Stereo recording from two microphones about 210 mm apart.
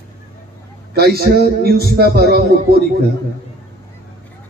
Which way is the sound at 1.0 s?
50° right (ahead or behind).